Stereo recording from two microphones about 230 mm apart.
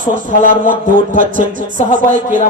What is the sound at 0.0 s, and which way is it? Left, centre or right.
A man's voice, right.